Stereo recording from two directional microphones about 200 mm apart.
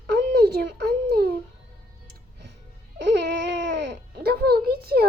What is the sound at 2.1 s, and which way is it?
Music, 55° right (ahead or behind).